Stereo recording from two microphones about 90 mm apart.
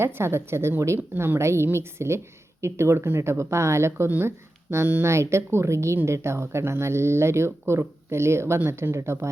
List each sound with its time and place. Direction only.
0.0 s a woman's voice: 25° right (ahead or behind)